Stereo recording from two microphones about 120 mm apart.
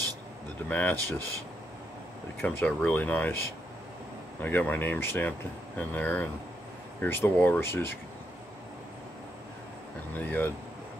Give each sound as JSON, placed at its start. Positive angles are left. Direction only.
{"t": 0.7, "sound": "speech", "side_deg": 15}
{"t": 2.4, "sound": "speech", "side_deg": 10}
{"t": 4.4, "sound": "speech", "side_deg": 15}
{"t": 10.1, "sound": "speech", "side_deg": 15}